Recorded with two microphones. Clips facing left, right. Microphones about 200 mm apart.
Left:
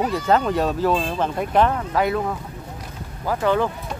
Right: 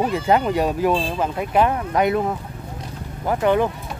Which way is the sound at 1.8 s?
20° right (ahead or behind).